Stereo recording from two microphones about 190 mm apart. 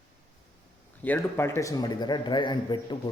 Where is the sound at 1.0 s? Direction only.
10° left (ahead or behind).